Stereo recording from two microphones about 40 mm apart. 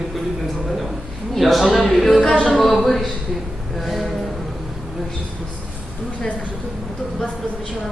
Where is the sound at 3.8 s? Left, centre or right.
Centre.